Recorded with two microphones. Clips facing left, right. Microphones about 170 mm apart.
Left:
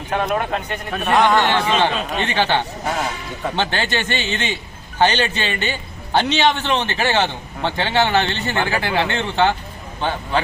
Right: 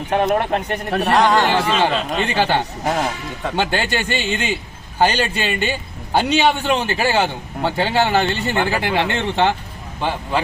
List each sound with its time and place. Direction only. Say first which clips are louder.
0.3 s a man's voice: right 3 dB; 45° right (ahead or behind)
1.1 s a man's voice: even; centre (ahead or behind)